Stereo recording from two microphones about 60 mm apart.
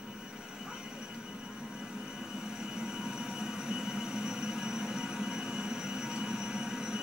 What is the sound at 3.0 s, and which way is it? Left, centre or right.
Train, centre.